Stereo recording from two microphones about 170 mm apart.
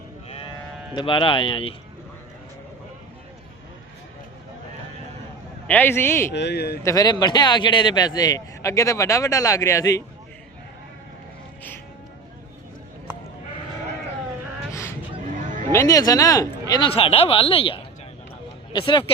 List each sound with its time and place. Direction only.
0.3 s sheep: 35° left (ahead or behind)
0.9 s a man's voice: 30° left (ahead or behind)
5.6 s a man's voice: 10° left (ahead or behind)
6.3 s speech: 75° left (ahead or behind)
6.8 s a man's voice: 20° left (ahead or behind)
14.7 s a sound: 15° left (ahead or behind)
15.7 s a man's voice: 20° left (ahead or behind)